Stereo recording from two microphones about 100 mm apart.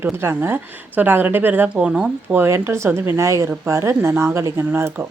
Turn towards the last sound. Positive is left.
turn(degrees=-25)  # may be behind; listen again after turning